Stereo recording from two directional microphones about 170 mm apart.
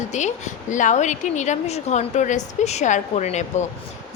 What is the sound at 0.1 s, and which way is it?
A woman's voice, 45° left (ahead or behind).